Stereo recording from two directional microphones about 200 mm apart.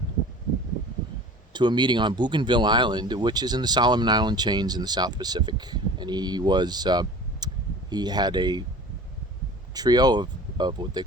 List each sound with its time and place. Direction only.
1.5 s speech: 20° right (ahead or behind)
9.7 s speech: 20° right (ahead or behind)